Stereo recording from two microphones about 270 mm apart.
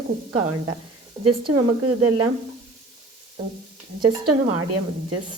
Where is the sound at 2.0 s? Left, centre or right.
Right.